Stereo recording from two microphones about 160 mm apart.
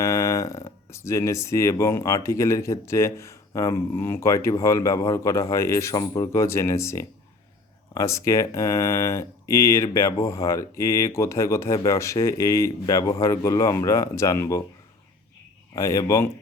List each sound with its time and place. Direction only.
0.0 s speech: 20° left (ahead or behind)
15.7 s speech: 20° left (ahead or behind)